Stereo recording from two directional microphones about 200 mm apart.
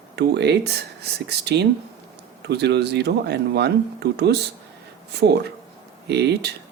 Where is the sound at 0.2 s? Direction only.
55° right (ahead or behind).